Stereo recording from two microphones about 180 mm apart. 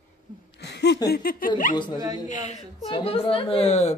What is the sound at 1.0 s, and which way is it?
Speech, 55° left (ahead or behind).